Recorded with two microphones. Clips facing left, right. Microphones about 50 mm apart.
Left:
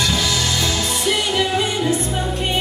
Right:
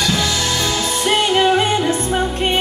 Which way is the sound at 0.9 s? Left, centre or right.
Right.